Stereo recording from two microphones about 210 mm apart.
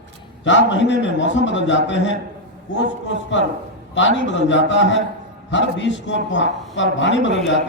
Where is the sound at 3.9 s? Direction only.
60° left (ahead or behind).